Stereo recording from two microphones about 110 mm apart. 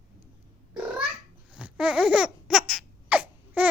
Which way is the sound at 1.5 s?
10° right (ahead or behind).